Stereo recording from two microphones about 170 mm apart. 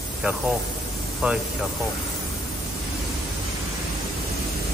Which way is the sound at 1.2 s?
5° right (ahead or behind).